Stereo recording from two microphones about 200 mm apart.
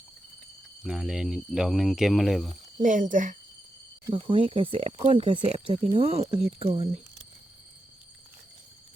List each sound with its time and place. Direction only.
0.9 s speech: 5° right (ahead or behind)
2.8 s speech: 40° right (ahead or behind)
4.0 s speech: 25° right (ahead or behind)